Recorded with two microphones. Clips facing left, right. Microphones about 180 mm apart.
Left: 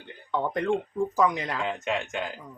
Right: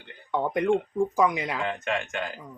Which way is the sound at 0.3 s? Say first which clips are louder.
Right 2 dB; 15° right (ahead or behind).